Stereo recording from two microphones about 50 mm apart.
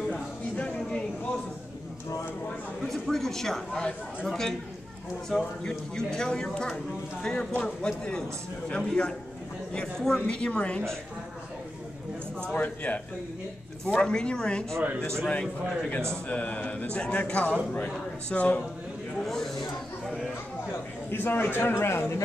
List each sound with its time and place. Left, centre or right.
0.1 s a sound: left
2.8 s a man's voice: centre
10.2 s speech: left
12.5 s speech: left
13.8 s speech: centre
16.3 s speech: left
19.2 s a sound: centre
21.1 s a man's voice: left